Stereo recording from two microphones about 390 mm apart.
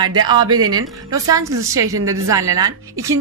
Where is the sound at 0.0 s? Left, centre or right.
Centre.